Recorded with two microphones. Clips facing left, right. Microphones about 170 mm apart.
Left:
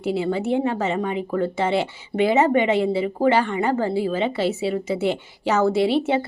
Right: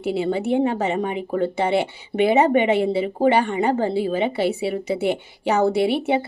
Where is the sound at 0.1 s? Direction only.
20° right (ahead or behind).